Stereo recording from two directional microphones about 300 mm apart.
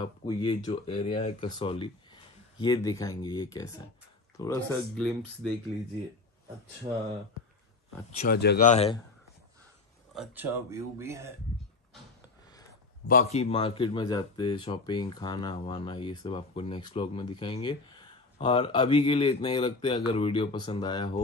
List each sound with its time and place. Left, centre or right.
0.0 s speech: centre
8.2 s speech: left
10.1 s speech: centre
13.1 s speech: left